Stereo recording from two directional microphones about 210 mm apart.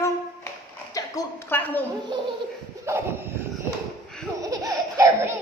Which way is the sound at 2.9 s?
10° right (ahead or behind).